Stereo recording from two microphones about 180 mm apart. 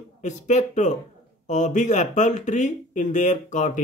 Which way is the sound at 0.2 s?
40° left (ahead or behind).